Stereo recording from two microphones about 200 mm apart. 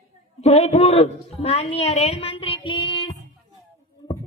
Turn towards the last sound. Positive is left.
turn(degrees=25)  # may be behind; listen again after turning